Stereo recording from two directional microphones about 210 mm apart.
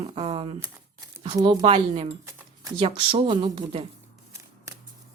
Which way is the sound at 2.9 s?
25° right (ahead or behind).